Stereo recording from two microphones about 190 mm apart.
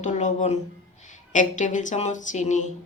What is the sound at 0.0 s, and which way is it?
A woman's voice, 40° left (ahead or behind).